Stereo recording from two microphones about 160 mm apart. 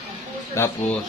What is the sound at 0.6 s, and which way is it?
Speech, 15° left (ahead or behind).